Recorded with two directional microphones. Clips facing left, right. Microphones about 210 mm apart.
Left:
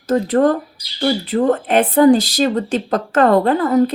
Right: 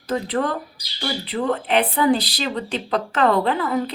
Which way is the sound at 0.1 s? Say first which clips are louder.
Left 8 dB; 45° left (ahead or behind).